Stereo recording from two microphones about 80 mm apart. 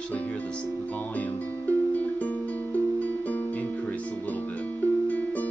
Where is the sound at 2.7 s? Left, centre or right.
Left.